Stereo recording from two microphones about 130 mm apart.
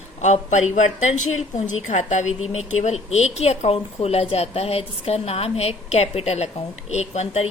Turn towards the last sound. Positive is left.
turn(degrees=55)  # may be behind; listen again after turning